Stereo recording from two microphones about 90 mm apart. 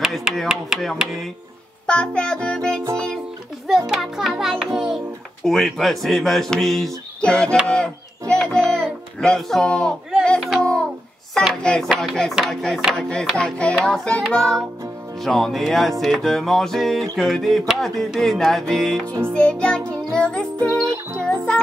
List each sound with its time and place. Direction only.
0.0 s music: 5° right (ahead or behind)
1.9 s speech: 10° left (ahead or behind)
3.6 s music: 5° right (ahead or behind)
7.2 s speech: 10° left (ahead or behind)
10.2 s a sound: 10° left (ahead or behind)
11.6 s music: 10° left (ahead or behind)
13.8 s speech: 10° left (ahead or behind)
15.2 s music: 5° left (ahead or behind)
19.3 s speech: 10° left (ahead or behind)
20.6 s music: 35° right (ahead or behind)
21.2 s music: 10° left (ahead or behind)